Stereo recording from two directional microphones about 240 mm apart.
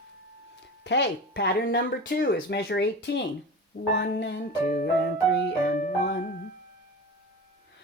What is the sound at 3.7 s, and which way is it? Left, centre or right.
Music, left.